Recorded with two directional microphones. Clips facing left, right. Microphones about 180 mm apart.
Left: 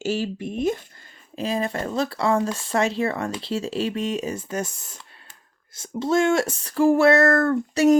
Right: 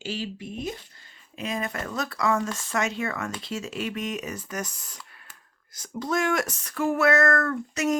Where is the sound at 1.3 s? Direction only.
30° left (ahead or behind).